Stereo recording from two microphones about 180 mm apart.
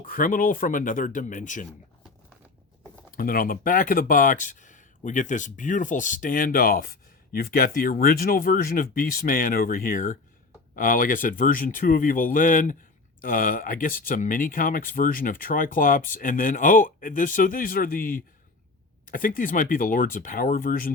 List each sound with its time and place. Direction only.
0.0 s speech: 50° left (ahead or behind)
3.1 s speech: 50° left (ahead or behind)